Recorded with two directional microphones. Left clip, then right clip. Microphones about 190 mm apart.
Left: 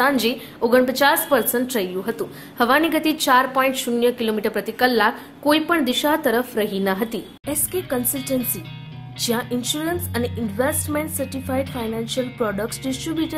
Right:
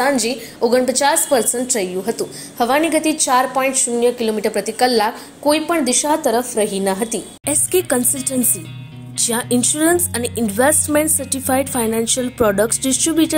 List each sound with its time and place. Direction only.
0.0 s a woman's voice: 5° right (ahead or behind)
7.4 s a woman's voice: 35° right (ahead or behind)